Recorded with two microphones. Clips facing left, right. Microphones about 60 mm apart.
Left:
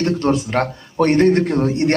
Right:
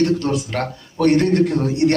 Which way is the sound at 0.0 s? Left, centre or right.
Left.